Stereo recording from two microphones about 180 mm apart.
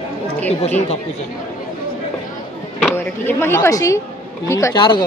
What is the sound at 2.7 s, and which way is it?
Speech, 10° left (ahead or behind).